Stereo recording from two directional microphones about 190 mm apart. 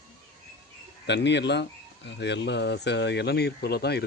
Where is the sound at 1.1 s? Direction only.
65° left (ahead or behind).